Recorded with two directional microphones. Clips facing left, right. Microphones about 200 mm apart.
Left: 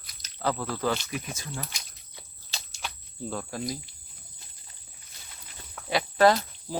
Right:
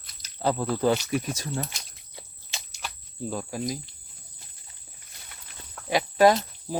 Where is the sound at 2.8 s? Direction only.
10° right (ahead or behind).